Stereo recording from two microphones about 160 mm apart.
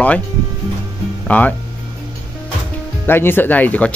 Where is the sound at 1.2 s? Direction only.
10° left (ahead or behind).